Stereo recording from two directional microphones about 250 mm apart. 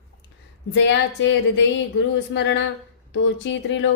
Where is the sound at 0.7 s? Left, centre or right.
Left.